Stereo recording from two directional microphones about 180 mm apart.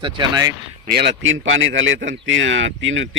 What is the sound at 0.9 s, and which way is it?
A man's voice, 80° right.